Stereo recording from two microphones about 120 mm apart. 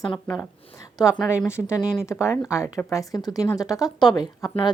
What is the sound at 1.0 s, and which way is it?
A woman's voice, 25° left (ahead or behind).